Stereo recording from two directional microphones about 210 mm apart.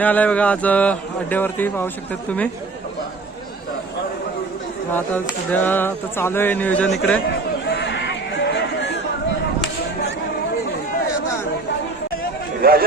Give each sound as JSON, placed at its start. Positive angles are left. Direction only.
{"t": 0.0, "sound": "speech", "side_deg": 5}
{"t": 4.9, "sound": "speech", "side_deg": 10}
{"t": 7.8, "sound": "a sound", "side_deg": 55}
{"t": 12.6, "sound": "a man's voice", "side_deg": -45}